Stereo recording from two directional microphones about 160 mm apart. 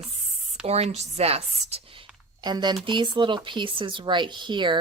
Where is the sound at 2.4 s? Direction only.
25° right (ahead or behind).